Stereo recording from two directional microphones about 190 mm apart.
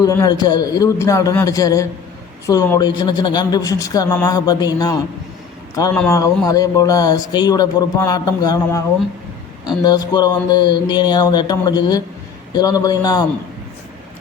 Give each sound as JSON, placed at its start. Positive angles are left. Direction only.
{"t": 0.0, "sound": "a man's voice", "side_deg": 20}
{"t": 6.1, "sound": "a man's voice", "side_deg": 15}